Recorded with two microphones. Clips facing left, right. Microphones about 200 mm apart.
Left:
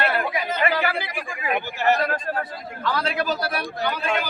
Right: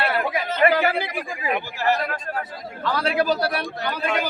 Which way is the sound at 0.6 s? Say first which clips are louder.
Right 6 dB; 45° right (ahead or behind).